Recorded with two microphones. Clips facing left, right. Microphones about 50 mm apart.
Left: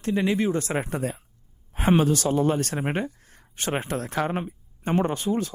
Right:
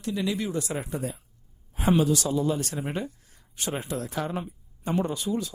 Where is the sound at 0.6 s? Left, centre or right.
Left.